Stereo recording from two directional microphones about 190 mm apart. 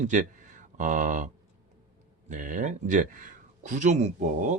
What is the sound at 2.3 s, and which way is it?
Speech, 40° right (ahead or behind).